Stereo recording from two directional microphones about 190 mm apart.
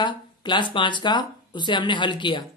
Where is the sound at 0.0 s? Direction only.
25° left (ahead or behind).